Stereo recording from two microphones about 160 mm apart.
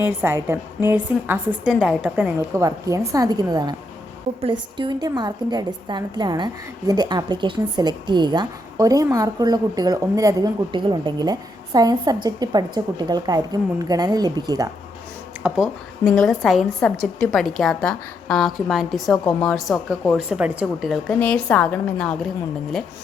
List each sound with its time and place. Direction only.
0.0 s a woman's voice: 15° right (ahead or behind)
2.6 s a woman's voice: 20° right (ahead or behind)
15.4 s a woman's voice: 5° right (ahead or behind)